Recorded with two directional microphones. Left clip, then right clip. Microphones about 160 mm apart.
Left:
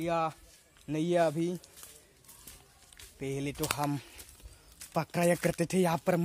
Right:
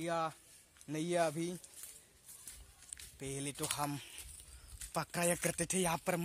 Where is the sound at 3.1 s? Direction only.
15° right (ahead or behind); by 6.2 s centre (ahead or behind).